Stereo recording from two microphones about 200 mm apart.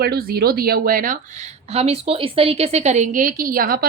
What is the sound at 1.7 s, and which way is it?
A woman's voice, 30° right (ahead or behind).